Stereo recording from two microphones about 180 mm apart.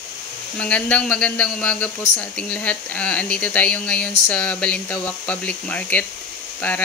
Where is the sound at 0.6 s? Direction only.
10° left (ahead or behind).